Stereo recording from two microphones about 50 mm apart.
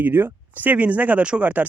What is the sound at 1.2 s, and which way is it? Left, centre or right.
Speech, right.